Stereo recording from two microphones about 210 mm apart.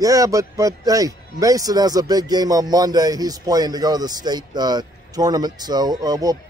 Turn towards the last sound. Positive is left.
turn(degrees=-15)  # may be behind; listen again after turning